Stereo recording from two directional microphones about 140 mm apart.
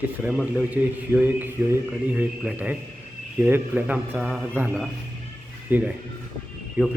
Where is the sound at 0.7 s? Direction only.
10° right (ahead or behind).